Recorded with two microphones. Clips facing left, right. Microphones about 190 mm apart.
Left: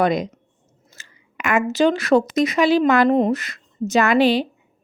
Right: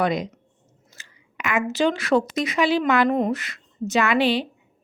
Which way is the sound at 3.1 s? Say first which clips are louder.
Left 5 dB; 30° left (ahead or behind).